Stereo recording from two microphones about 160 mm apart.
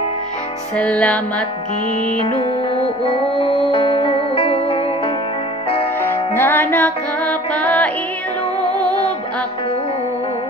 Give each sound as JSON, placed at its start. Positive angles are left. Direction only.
{"t": 0.7, "sound": "music", "side_deg": 10}
{"t": 2.2, "sound": "music", "side_deg": 35}
{"t": 6.0, "sound": "music", "side_deg": 15}
{"t": 8.6, "sound": "music", "side_deg": -25}